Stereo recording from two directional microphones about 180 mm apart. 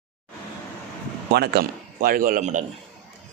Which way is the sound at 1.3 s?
60° right (ahead or behind).